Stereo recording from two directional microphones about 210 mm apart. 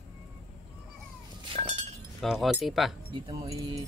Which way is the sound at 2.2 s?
Centre (ahead or behind).